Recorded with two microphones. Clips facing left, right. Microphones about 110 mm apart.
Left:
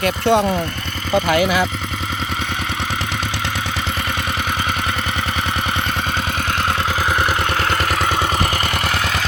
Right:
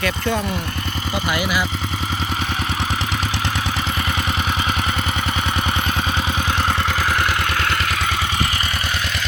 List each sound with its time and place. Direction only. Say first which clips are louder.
0.3 s speech: left 8 dB; 70° left (ahead or behind)
1.1 s speech: left 7 dB; 25° left (ahead or behind)